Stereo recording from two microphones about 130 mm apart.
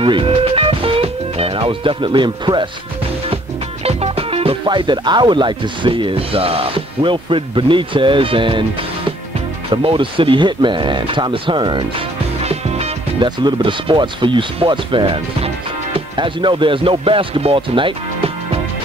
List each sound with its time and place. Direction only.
0.0 s music: 45° right (ahead or behind)
3.8 s music: 50° right (ahead or behind)
4.6 s speech: 35° right (ahead or behind)
9.7 s speech: 45° right (ahead or behind)
12.4 s music: 55° right (ahead or behind)
13.2 s speech: 35° right (ahead or behind)